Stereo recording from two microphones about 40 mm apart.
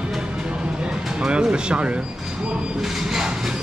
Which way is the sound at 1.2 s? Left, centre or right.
Right.